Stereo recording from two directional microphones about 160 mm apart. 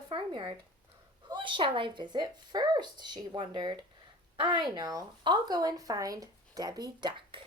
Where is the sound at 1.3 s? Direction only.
30° right (ahead or behind).